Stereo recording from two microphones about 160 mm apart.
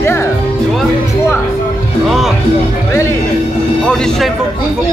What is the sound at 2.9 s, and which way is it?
Speech, 15° left (ahead or behind).